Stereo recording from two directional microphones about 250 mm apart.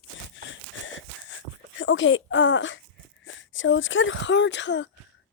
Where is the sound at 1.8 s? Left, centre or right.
Left.